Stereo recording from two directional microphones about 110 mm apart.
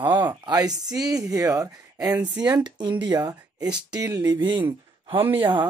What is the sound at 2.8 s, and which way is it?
Speech, 45° right (ahead or behind).